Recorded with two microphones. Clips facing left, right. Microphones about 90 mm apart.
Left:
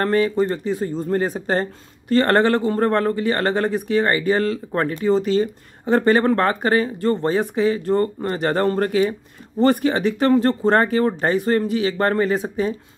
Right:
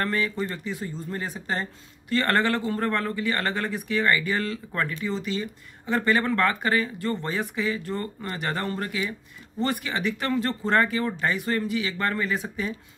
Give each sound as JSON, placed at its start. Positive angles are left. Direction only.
{"t": 0.0, "sound": "speech", "side_deg": 35}